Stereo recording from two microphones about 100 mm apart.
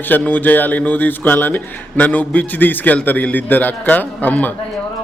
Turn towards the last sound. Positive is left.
turn(degrees=15)  # may be behind; listen again after turning